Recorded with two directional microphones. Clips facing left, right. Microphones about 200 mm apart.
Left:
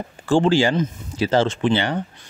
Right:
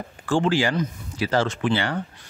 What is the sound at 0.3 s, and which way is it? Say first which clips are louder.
Speech: left 4 dB; 25° left (ahead or behind).